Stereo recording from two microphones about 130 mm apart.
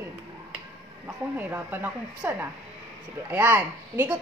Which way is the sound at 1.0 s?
15° right (ahead or behind).